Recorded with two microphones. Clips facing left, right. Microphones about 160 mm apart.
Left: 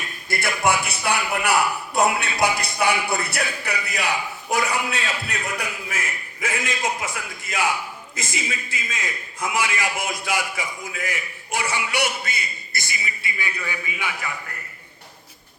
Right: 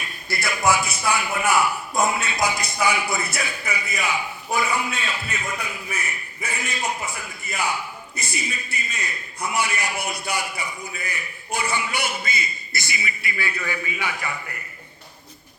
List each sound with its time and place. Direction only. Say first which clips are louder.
0.3 s a man's voice: even; 55° left (ahead or behind)
13.2 s a man's voice: right 2 dB; 20° left (ahead or behind)